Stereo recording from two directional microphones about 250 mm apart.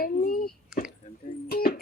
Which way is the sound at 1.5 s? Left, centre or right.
Left.